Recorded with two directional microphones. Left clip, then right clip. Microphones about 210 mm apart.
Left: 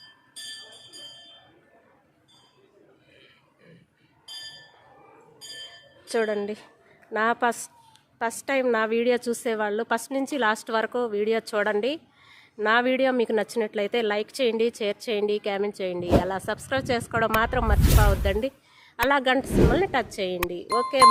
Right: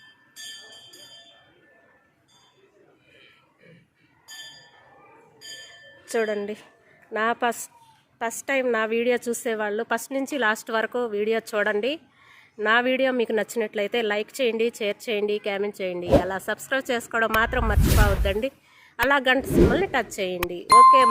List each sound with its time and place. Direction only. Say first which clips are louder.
6.1 s a woman's voice: even; centre (ahead or behind)